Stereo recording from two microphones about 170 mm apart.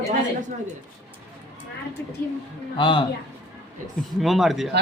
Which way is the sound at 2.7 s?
30° left (ahead or behind).